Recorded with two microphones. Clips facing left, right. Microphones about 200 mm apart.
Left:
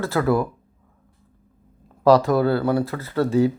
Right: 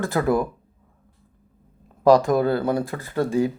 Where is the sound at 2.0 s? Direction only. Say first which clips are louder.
Even; 15° right (ahead or behind).